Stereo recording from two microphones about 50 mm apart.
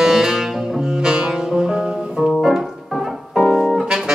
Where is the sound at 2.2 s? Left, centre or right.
Centre.